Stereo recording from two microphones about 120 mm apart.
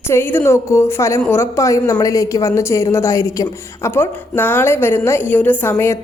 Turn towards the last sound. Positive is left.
turn(degrees=20)  # may be behind; listen again after turning